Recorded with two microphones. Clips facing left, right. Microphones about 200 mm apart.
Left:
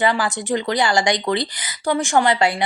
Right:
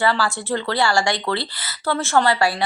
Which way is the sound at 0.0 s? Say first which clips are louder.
Left 1 dB; 20° left (ahead or behind).